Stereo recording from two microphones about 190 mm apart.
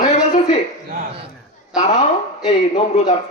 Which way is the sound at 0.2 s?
35° left (ahead or behind).